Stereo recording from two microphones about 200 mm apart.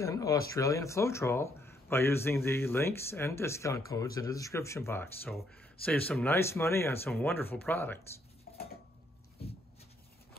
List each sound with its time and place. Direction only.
0.0 s speech: 15° left (ahead or behind)
8.5 s dishes: 45° left (ahead or behind)